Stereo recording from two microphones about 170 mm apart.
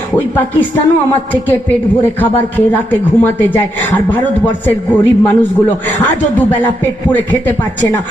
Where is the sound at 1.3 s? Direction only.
10° left (ahead or behind).